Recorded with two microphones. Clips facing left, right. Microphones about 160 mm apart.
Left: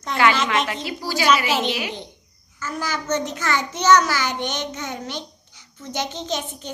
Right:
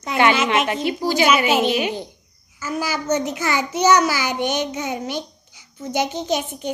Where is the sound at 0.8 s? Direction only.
20° right (ahead or behind).